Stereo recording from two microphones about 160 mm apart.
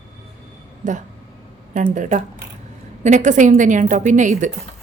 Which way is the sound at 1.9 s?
55° right (ahead or behind).